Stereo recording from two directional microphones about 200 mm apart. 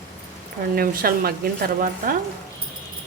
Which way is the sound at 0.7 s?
50° right (ahead or behind).